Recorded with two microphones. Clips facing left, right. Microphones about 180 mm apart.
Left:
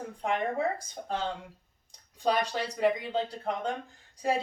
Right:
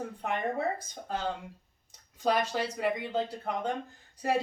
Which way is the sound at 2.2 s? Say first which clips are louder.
Even; 5° right (ahead or behind).